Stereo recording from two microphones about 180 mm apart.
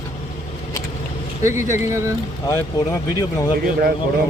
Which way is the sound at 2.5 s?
15° left (ahead or behind).